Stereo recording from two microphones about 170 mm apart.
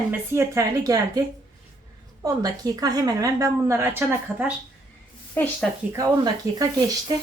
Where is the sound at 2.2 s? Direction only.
20° right (ahead or behind).